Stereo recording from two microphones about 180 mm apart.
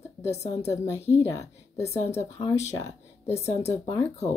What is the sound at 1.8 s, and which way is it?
Speech, 35° left (ahead or behind).